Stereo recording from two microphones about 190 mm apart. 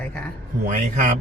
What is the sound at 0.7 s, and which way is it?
Speech, 45° right (ahead or behind).